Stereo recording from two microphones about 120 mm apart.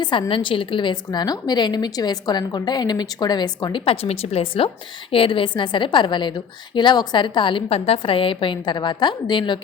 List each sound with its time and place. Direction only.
0.0 s a woman's voice: 40° left (ahead or behind)